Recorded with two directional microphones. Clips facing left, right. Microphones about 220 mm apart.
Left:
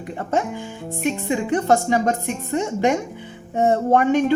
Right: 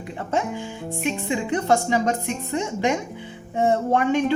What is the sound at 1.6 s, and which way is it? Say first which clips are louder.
Speech: left 1 dB; 45° left (ahead or behind).